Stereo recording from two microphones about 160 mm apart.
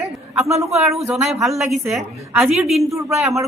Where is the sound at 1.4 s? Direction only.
Centre (ahead or behind).